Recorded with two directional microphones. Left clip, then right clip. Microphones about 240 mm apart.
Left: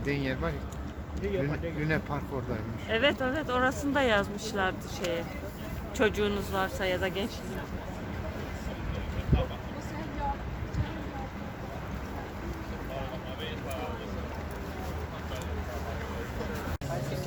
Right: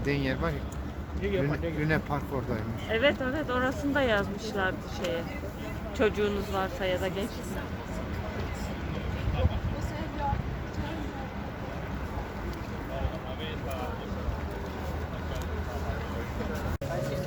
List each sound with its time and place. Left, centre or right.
0.0 s speech: centre
2.9 s speech: left